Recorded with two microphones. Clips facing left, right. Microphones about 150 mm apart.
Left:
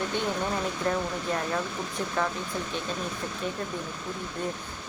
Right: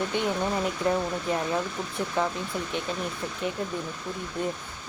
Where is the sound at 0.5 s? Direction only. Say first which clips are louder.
Right 2 dB; 15° right (ahead or behind).